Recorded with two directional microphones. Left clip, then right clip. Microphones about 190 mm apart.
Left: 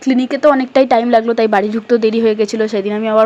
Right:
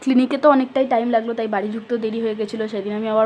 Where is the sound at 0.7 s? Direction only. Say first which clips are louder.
Left 7 dB; 25° left (ahead or behind).